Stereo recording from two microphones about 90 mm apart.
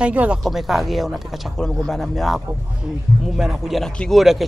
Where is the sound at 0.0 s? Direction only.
15° right (ahead or behind).